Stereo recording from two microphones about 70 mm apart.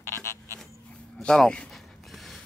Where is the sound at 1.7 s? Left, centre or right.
Centre.